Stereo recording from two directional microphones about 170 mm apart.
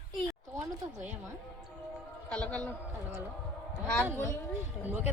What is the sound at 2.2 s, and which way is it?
Speech, 10° left (ahead or behind).